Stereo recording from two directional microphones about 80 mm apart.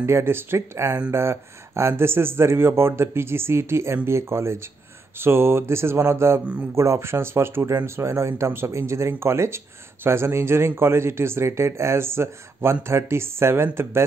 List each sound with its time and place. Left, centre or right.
0.0 s speech: right